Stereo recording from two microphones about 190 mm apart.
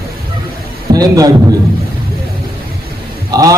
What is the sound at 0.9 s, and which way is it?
Speech, 20° right (ahead or behind).